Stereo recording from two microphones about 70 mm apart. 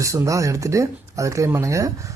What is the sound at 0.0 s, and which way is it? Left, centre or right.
Speech, right.